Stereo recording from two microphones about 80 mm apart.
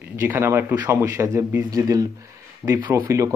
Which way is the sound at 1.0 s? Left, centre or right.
Right.